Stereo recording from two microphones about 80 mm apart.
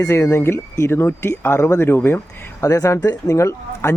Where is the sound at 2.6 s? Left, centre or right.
Left.